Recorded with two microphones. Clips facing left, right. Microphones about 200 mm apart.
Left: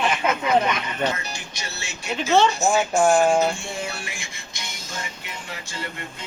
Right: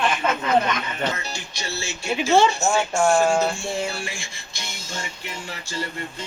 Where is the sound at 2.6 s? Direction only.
20° left (ahead or behind).